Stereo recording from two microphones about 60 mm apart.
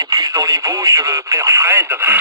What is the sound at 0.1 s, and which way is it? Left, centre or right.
Speech, right.